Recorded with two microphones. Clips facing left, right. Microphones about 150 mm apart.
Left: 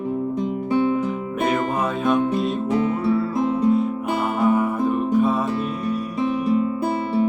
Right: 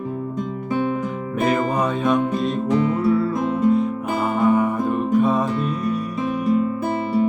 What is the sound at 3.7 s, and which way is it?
Music, centre (ahead or behind).